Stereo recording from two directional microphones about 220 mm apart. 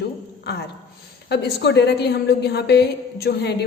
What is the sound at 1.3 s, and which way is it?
A woman's voice, 50° left (ahead or behind).